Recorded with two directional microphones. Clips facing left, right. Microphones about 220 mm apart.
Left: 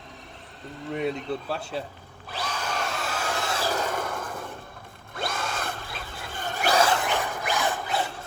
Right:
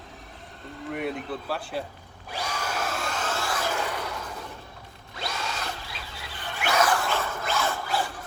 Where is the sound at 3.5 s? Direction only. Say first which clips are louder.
Left 2 dB; 30° left (ahead or behind); by 4.3 s 50° left (ahead or behind).